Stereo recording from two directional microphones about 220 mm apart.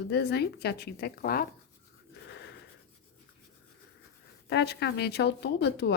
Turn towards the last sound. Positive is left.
turn(degrees=50)  # may be behind; listen again after turning